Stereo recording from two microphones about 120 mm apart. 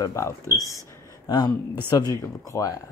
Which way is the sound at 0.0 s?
25° left (ahead or behind).